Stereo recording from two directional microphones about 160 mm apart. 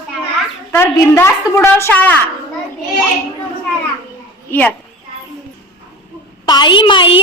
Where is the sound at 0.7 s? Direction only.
15° left (ahead or behind).